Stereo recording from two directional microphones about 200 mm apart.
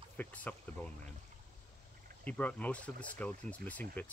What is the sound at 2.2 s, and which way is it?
Speech, 5° left (ahead or behind).